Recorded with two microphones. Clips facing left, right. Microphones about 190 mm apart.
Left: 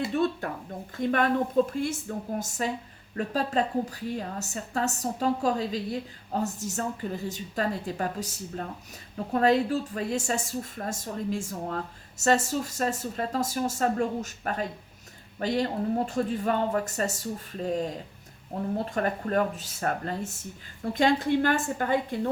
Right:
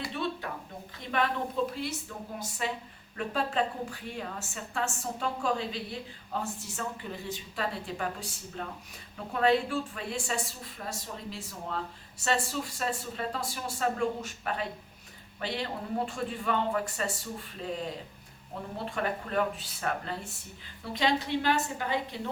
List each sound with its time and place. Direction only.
0.4 s a woman's voice: 45° left (ahead or behind)